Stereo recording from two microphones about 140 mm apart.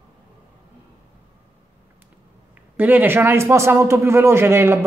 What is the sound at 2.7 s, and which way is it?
A woman's voice, 15° right (ahead or behind).